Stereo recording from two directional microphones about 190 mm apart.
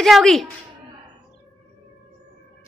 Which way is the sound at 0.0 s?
Centre (ahead or behind).